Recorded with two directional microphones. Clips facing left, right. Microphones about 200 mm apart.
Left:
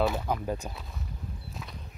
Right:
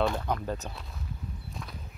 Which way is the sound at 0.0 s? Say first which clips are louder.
Left 1 dB; 5° left (ahead or behind).